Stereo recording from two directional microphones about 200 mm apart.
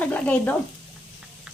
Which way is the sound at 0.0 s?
5° left (ahead or behind).